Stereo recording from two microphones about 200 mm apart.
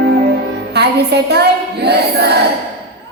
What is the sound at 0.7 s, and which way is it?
Music, 55° right (ahead or behind).